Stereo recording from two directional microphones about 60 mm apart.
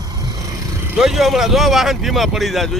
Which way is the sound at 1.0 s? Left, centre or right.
Centre.